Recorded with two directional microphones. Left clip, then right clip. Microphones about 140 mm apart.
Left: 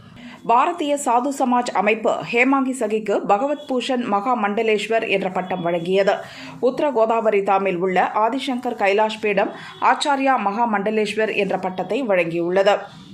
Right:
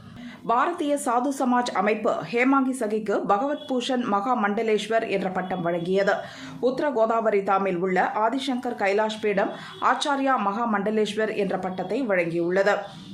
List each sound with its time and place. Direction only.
0.4 s speech: 15° left (ahead or behind)